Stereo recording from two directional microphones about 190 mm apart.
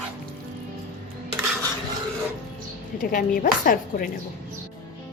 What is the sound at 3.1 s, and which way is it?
Speech, 45° left (ahead or behind).